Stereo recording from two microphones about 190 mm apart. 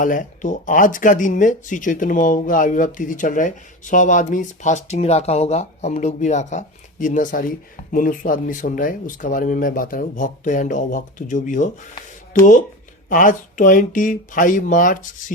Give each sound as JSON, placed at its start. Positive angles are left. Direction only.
{"t": 0.0, "sound": "speech", "side_deg": 45}